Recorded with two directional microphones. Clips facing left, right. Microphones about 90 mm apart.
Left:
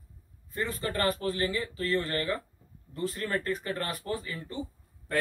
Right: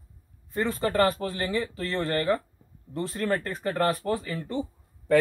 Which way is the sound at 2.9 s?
60° right (ahead or behind).